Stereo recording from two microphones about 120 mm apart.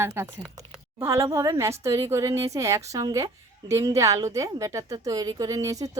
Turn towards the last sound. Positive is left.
turn(degrees=-30)  # may be behind; listen again after turning